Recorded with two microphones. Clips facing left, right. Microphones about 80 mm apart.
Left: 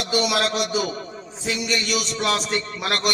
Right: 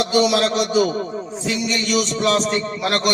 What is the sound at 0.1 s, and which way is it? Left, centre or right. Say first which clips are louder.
A man's voice: right 2 dB; right.